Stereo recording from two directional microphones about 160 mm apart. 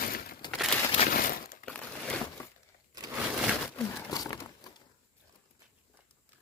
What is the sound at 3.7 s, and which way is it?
Crumpling, 20° left (ahead or behind).